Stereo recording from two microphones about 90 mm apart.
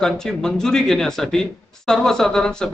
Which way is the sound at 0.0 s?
5° left (ahead or behind).